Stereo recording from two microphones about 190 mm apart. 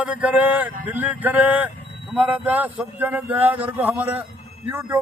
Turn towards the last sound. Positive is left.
turn(degrees=-10)  # may be behind; listen again after turning